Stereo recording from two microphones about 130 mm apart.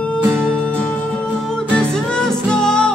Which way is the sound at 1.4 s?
5° left (ahead or behind).